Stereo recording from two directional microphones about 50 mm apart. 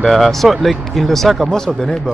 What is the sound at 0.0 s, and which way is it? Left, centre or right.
Speech, centre.